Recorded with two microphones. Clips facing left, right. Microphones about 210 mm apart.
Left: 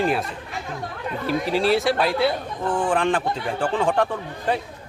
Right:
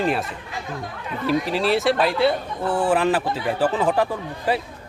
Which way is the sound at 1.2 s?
Centre (ahead or behind).